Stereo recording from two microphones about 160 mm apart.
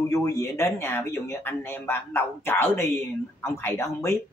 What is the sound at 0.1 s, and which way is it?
Speech, 20° left (ahead or behind).